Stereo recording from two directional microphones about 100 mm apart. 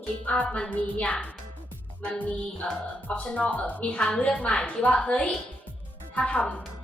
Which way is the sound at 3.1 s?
15° left (ahead or behind).